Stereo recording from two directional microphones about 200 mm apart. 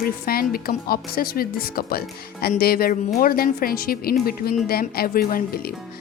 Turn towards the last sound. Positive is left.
turn(degrees=45)  # may be behind; listen again after turning